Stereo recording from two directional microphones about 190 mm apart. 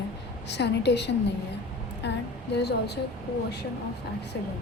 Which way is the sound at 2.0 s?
65° left (ahead or behind).